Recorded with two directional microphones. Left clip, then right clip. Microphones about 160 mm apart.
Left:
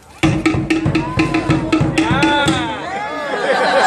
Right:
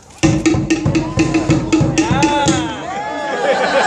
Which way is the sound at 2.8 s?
55° left (ahead or behind).